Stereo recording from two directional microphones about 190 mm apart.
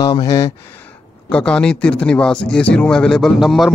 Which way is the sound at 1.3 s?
5° left (ahead or behind).